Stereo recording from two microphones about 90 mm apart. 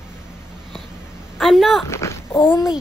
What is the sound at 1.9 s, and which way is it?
Speech, 30° left (ahead or behind).